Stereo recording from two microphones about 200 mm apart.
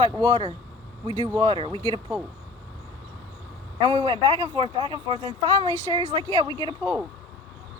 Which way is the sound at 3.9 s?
25° right (ahead or behind).